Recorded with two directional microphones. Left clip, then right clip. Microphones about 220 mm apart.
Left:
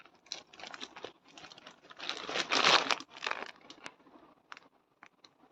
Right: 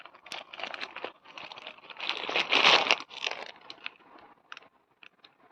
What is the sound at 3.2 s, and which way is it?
Crumpling, 30° left (ahead or behind).